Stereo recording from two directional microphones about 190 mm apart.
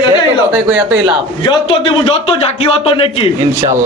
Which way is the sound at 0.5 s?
10° right (ahead or behind).